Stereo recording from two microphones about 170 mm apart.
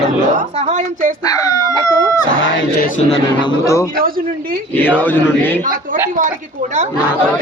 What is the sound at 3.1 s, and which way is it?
Speech, 25° left (ahead or behind).